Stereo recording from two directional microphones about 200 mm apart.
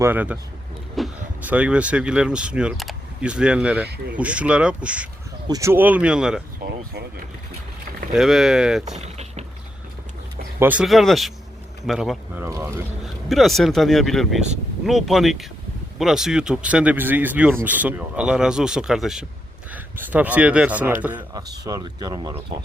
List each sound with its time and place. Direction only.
0.0 s speech: 10° right (ahead or behind)
3.8 s speech: 55° right (ahead or behind)
4.1 s speech: 5° right (ahead or behind)
8.1 s speech: centre (ahead or behind)
8.8 s a sound: 35° right (ahead or behind)
10.6 s speech: 5° right (ahead or behind)
13.2 s speech: centre (ahead or behind)
21.6 s speech: 20° right (ahead or behind)